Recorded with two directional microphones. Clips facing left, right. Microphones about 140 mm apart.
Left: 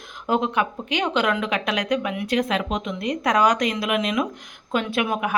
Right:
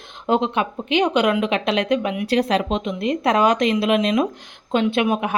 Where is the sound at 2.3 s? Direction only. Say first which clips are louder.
Right 4 dB; 35° right (ahead or behind).